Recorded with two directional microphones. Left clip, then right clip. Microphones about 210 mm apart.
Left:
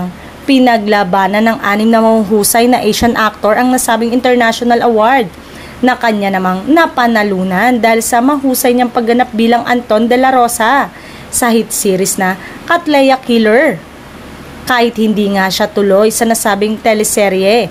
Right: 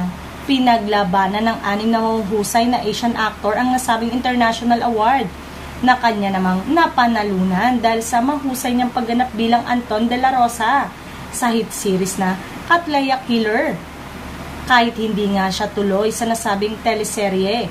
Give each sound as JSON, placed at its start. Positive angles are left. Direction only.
{"t": 0.5, "sound": "a woman's voice", "side_deg": 45}
{"t": 15.0, "sound": "a woman's voice", "side_deg": 45}